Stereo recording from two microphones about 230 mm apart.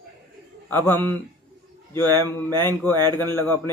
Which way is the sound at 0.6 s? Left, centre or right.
Centre.